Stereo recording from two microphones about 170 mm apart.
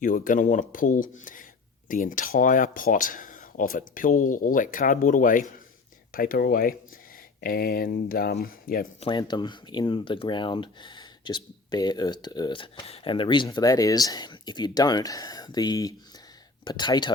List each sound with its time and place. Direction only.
0.0 s speech: 55° left (ahead or behind)
9.0 s speech: 30° left (ahead or behind)